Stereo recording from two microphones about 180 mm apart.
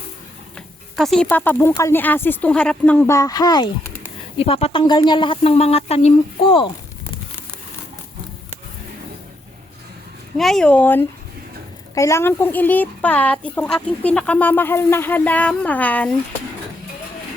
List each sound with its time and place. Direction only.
0.5 s speech: centre (ahead or behind); by 3.7 s 20° left (ahead or behind)
4.0 s speech: 35° left (ahead or behind)
10.3 s speech: centre (ahead or behind)